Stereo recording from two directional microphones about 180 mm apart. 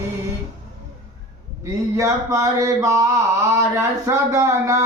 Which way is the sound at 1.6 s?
15° right (ahead or behind).